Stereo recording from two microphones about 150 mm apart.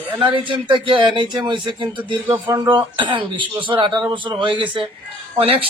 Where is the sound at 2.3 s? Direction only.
20° right (ahead or behind).